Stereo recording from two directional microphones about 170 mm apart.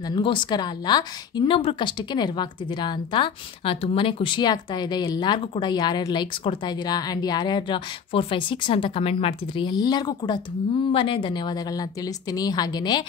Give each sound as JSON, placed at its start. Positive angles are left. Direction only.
{"t": 0.1, "sound": "a woman's voice", "side_deg": 30}